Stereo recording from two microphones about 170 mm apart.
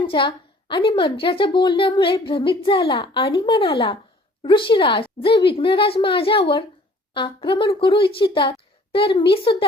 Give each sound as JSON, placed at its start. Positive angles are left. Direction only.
{"t": 0.0, "sound": "a woman's voice", "side_deg": 30}